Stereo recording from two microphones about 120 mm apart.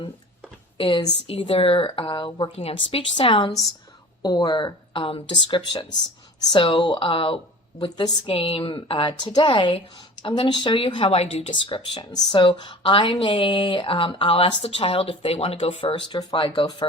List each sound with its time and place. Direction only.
0.8 s speech: 45° left (ahead or behind)